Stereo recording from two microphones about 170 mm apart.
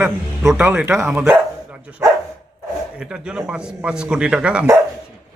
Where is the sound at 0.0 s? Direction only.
10° right (ahead or behind).